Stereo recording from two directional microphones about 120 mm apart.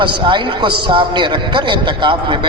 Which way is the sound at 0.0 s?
45° right (ahead or behind).